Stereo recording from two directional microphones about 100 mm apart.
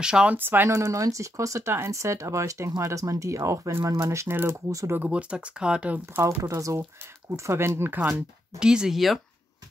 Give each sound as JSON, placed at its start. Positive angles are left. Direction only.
{"t": 0.0, "sound": "speech", "side_deg": -10}
{"t": 0.4, "sound": "speech", "side_deg": -20}
{"t": 4.9, "sound": "speech", "side_deg": -15}
{"t": 6.1, "sound": "speech", "side_deg": -25}
{"t": 8.5, "sound": "speech", "side_deg": -5}